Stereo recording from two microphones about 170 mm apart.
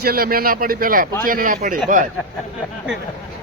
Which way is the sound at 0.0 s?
60° right (ahead or behind).